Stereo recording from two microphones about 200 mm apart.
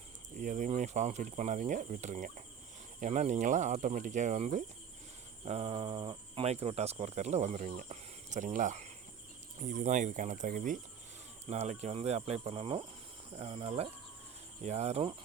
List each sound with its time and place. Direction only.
0.3 s speech: 40° right (ahead or behind)
11.4 s speech: 35° right (ahead or behind)